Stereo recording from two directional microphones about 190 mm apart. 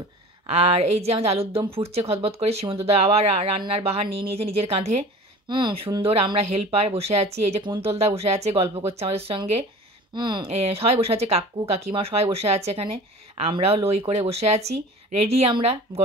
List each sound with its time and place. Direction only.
0.5 s speech: 30° right (ahead or behind)